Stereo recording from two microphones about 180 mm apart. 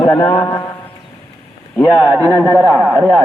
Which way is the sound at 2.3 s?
15° right (ahead or behind).